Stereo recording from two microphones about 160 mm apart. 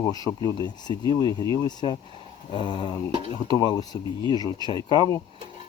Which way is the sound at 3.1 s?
30° right (ahead or behind).